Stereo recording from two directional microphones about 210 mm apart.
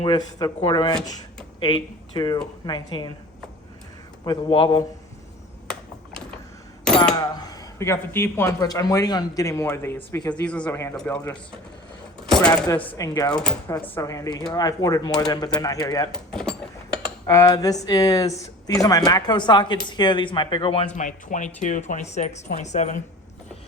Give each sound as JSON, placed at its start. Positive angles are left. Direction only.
{"t": 0.0, "sound": "speech", "side_deg": 20}
{"t": 4.2, "sound": "speech", "side_deg": 20}
{"t": 6.8, "sound": "a sound", "side_deg": 5}
{"t": 7.3, "sound": "a man's voice", "side_deg": 20}
{"t": 12.5, "sound": "a man's voice", "side_deg": 20}
{"t": 13.4, "sound": "a man's voice", "side_deg": 5}
{"t": 16.1, "sound": "a sound", "side_deg": 5}
{"t": 17.2, "sound": "speech", "side_deg": 15}